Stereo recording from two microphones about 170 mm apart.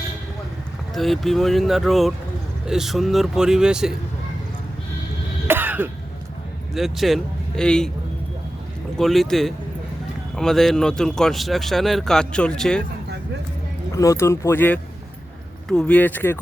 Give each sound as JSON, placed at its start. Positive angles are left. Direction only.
{"t": 0.9, "sound": "speech", "side_deg": 0}
{"t": 5.5, "sound": "cough", "side_deg": -10}
{"t": 6.7, "sound": "speech", "side_deg": 0}
{"t": 9.0, "sound": "speech", "side_deg": 0}
{"t": 13.9, "sound": "speech", "side_deg": 15}